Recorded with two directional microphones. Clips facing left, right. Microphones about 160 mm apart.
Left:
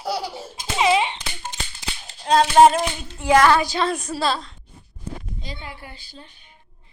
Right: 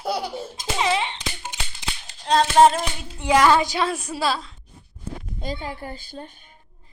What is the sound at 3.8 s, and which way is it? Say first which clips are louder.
Child singing: left 1 dB; 10° right (ahead or behind).